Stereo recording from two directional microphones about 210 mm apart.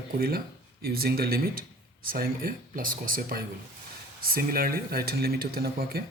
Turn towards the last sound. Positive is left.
turn(degrees=-45)  # may be behind; listen again after turning